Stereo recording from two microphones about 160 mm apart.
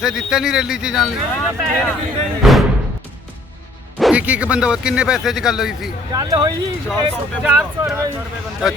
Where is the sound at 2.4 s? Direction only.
Centre (ahead or behind).